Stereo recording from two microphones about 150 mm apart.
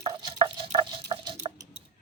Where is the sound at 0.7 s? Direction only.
40° right (ahead or behind).